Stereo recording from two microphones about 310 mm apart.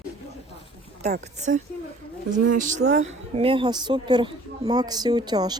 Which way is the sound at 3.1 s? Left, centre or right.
Centre.